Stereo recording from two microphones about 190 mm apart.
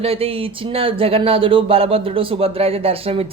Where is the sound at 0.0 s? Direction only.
30° right (ahead or behind).